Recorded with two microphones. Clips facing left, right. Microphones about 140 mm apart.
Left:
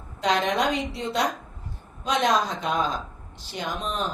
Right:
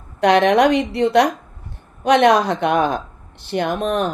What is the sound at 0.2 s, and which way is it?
A woman's voice, 65° right (ahead or behind).